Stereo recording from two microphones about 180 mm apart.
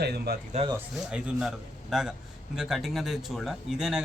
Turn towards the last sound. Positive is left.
turn(degrees=-5)  # may be behind; listen again after turning